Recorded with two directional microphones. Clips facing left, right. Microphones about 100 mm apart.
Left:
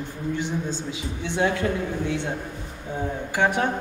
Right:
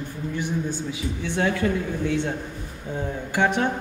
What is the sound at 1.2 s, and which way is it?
Speech, 15° left (ahead or behind).